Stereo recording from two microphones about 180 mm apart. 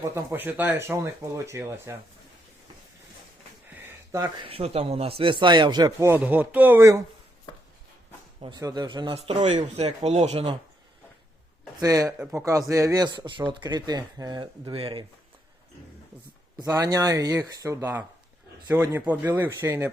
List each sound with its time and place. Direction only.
0.0 s speech: 15° right (ahead or behind)
3.8 s a sound: 15° right (ahead or behind)
4.4 s speech: 35° right (ahead or behind); by 7.0 s 15° right (ahead or behind)
8.4 s speech: 25° right (ahead or behind)
11.8 s speech: 20° right (ahead or behind)
16.6 s speech: 20° right (ahead or behind)